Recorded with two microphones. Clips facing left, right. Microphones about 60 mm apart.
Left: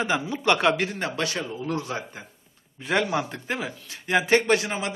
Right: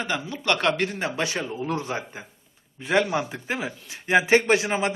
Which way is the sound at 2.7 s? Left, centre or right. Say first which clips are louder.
Right 2 dB; centre.